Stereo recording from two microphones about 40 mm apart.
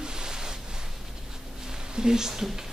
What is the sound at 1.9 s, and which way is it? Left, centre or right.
Speech, centre.